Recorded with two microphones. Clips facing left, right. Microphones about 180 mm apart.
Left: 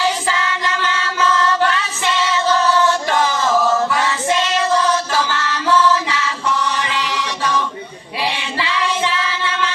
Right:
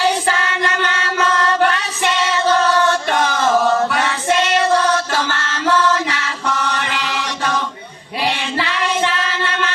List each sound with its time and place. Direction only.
0.0 s child singing: 60° right (ahead or behind)
5.6 s music: 60° right (ahead or behind)
8.2 s child singing: 60° right (ahead or behind)